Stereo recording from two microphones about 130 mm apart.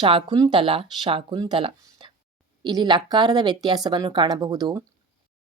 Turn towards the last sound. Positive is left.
turn(degrees=-30)  # may be behind; listen again after turning